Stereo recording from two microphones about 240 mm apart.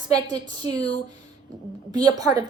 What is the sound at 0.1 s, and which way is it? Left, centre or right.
Speech, centre.